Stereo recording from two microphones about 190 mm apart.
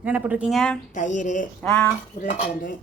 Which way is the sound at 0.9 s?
40° left (ahead or behind).